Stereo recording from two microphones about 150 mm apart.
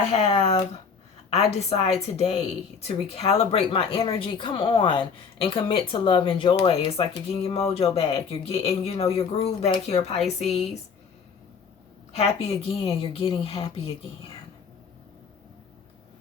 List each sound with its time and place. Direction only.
0.1 s speech: 40° left (ahead or behind)
12.1 s speech: 45° left (ahead or behind)